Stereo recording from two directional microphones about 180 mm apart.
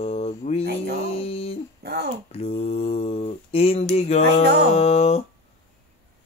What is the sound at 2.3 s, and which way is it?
Mantra, 35° left (ahead or behind).